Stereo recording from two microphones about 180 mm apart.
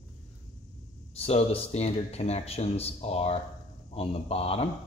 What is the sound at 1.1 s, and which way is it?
Speech, 35° left (ahead or behind).